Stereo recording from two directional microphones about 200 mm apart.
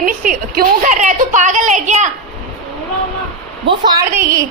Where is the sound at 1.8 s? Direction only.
35° right (ahead or behind).